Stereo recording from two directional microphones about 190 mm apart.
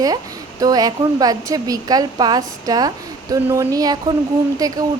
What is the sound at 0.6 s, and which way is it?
Speech, 20° right (ahead or behind).